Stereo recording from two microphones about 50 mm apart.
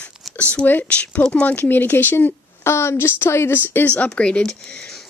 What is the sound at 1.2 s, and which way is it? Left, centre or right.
Speech, left.